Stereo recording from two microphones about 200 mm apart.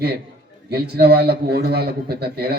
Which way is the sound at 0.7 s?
55° right (ahead or behind).